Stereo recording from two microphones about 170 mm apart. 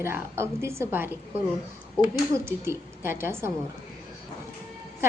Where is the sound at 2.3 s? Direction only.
15° right (ahead or behind).